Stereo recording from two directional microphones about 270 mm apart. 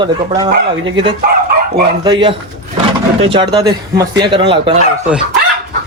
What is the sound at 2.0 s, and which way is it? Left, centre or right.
Speech, centre.